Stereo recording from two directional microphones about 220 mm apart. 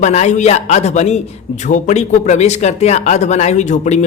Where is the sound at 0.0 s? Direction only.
30° left (ahead or behind).